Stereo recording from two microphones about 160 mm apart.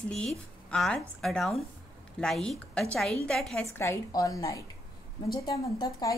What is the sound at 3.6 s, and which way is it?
A woman's voice, 20° left (ahead or behind).